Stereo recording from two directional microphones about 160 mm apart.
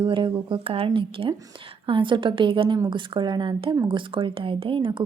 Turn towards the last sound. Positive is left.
turn(degrees=-30)  # may be behind; listen again after turning